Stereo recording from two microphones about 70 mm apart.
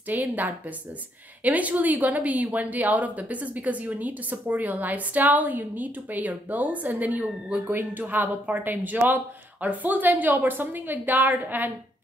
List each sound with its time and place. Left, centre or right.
0.1 s speech: right